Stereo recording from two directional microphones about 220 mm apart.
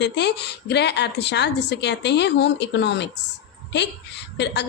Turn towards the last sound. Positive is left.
turn(degrees=50)  # may be behind; listen again after turning